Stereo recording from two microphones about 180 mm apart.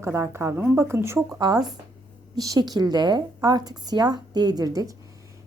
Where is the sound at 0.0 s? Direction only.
15° right (ahead or behind).